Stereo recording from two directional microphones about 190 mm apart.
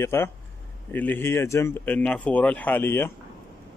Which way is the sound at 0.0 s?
15° left (ahead or behind).